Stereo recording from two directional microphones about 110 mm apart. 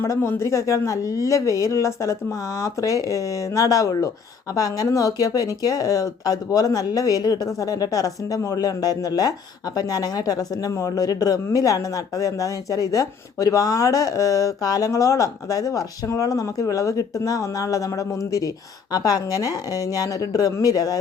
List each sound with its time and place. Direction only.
0.0 s speech: 20° left (ahead or behind)